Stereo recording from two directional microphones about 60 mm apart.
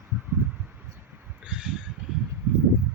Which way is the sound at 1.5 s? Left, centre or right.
Centre.